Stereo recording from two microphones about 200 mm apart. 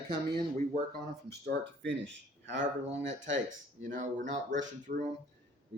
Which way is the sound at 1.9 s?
65° right (ahead or behind).